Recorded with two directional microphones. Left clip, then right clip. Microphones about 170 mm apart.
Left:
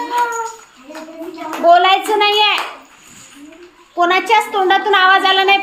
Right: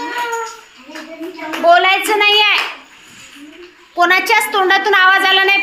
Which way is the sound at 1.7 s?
20° left (ahead or behind).